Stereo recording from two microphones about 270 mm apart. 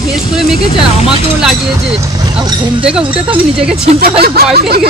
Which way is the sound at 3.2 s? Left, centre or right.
Centre.